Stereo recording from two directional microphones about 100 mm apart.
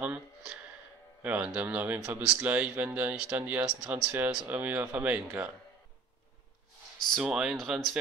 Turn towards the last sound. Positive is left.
turn(degrees=-5)  # may be behind; listen again after turning